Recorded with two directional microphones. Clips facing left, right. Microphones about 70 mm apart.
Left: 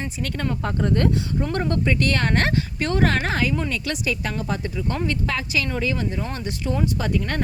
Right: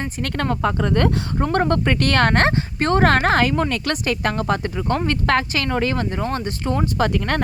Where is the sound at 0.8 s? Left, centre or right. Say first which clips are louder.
Right 2 dB; right.